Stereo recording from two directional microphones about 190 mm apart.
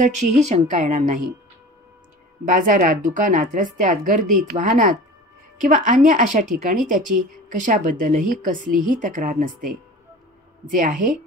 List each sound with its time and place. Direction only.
0.0 s a woman's voice: 40° right (ahead or behind)
2.4 s speech: 45° right (ahead or behind)